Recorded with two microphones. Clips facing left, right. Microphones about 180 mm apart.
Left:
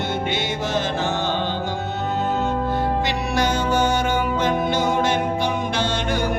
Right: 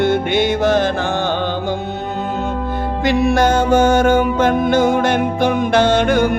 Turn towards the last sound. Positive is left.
turn(degrees=-55)  # may be behind; listen again after turning